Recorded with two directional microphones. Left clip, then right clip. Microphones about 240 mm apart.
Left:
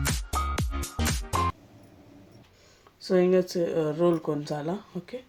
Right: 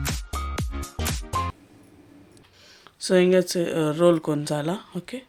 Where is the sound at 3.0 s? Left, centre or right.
Right.